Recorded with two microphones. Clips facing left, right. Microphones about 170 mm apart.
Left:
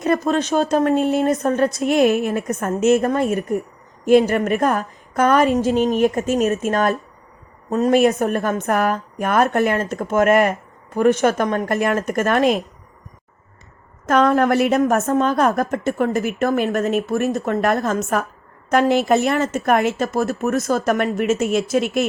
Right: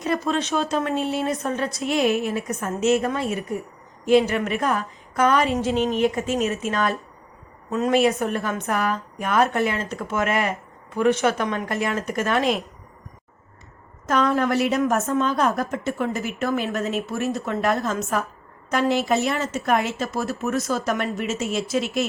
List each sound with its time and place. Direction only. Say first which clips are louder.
0.0 s a woman's voice: left 5 dB; 50° left (ahead or behind)
14.1 s a woman's voice: left 5 dB; 55° left (ahead or behind)